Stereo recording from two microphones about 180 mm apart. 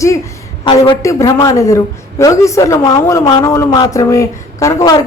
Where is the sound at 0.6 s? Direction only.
25° left (ahead or behind).